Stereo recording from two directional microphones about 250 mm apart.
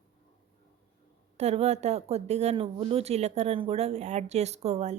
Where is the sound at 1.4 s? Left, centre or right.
Right.